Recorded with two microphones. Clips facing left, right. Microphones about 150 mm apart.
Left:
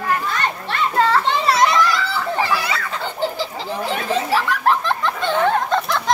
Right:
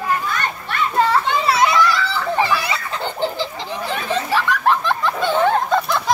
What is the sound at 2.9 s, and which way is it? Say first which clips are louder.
Baby laughter: right 1 dB; 5° left (ahead or behind).